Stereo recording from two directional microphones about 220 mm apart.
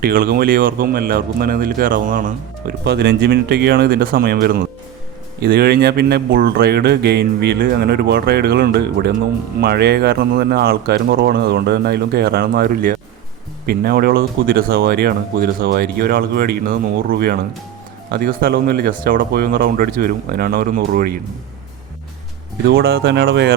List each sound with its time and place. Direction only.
0.0 s speech: 40° right (ahead or behind)
22.6 s speech: 45° right (ahead or behind)